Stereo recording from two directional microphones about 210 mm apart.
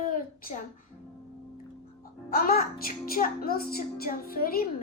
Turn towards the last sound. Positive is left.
turn(degrees=45)  # may be behind; listen again after turning